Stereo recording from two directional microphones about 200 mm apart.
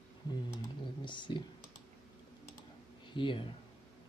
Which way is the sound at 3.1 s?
25° left (ahead or behind).